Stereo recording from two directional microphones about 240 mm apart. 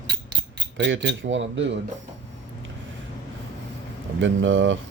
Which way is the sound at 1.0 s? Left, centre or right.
Right.